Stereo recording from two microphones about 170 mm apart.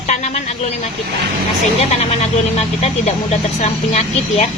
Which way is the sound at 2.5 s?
40° left (ahead or behind).